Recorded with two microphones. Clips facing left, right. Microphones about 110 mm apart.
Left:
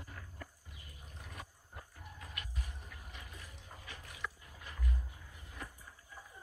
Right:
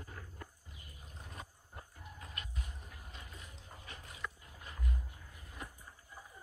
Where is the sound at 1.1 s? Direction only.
25° right (ahead or behind).